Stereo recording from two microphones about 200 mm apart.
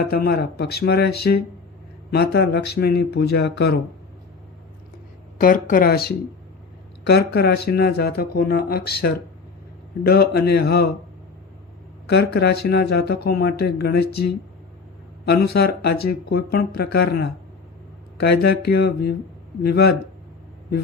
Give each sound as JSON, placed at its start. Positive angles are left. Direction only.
{"t": 0.0, "sound": "speech", "side_deg": 50}
{"t": 5.4, "sound": "speech", "side_deg": 40}
{"t": 12.0, "sound": "speech", "side_deg": 55}